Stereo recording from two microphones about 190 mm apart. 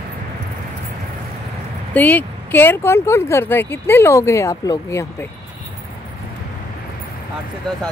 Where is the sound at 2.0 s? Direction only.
10° left (ahead or behind).